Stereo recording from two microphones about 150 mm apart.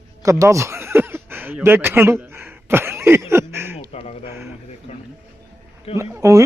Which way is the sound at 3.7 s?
45° left (ahead or behind).